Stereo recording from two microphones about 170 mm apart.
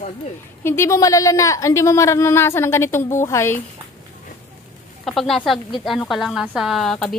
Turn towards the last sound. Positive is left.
turn(degrees=0)  # may be behind; listen again after turning